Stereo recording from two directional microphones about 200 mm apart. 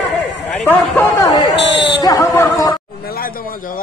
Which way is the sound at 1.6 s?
60° left (ahead or behind).